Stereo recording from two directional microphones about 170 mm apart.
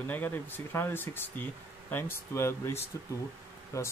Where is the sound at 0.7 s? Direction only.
10° left (ahead or behind).